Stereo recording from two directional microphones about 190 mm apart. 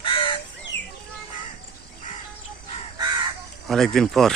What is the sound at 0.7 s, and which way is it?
Bird, 10° left (ahead or behind).